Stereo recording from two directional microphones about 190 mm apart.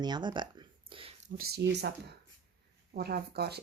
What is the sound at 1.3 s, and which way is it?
Speech, 60° right (ahead or behind).